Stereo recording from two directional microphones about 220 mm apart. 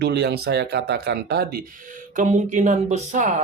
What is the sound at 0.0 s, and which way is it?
Speech, 50° right (ahead or behind).